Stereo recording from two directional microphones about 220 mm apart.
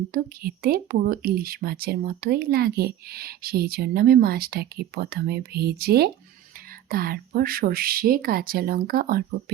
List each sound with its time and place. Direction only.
0.1 s speech: 40° right (ahead or behind)